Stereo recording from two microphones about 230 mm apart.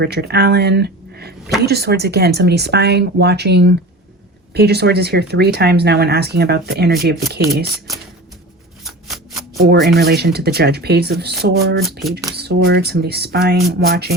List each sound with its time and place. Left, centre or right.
0.0 s speech: right
8.8 s shuffling cards: centre
9.8 s speech: right
11.8 s speech: centre
12.3 s speech: right